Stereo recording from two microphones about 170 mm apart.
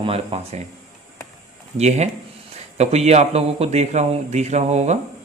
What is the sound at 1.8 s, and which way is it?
Speech, 40° right (ahead or behind).